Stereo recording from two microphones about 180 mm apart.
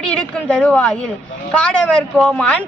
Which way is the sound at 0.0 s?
5° left (ahead or behind).